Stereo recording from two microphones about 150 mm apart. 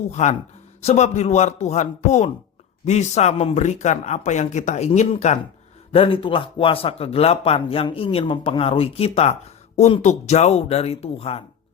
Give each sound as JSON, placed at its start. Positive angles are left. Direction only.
{"t": 0.1, "sound": "speech", "side_deg": 50}
{"t": 5.9, "sound": "speech", "side_deg": 40}